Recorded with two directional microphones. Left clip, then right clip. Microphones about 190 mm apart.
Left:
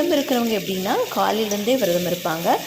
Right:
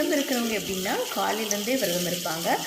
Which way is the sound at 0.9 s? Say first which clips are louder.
Left 7 dB; 15° left (ahead or behind).